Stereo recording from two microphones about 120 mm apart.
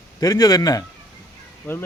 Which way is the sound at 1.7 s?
15° left (ahead or behind).